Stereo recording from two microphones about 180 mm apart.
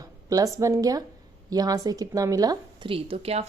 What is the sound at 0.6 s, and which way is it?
A woman's voice, 20° right (ahead or behind).